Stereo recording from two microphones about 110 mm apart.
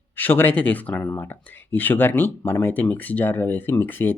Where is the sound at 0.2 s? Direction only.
15° left (ahead or behind).